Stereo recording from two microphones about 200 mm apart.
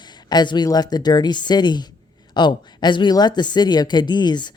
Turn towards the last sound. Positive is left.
turn(degrees=20)  # may be behind; listen again after turning